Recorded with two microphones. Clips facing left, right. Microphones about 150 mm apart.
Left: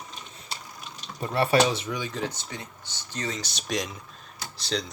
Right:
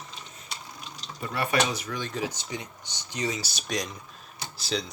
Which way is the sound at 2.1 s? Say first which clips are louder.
Even; 10° right (ahead or behind).